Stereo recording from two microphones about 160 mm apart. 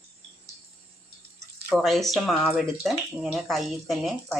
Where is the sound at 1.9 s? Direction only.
Centre (ahead or behind).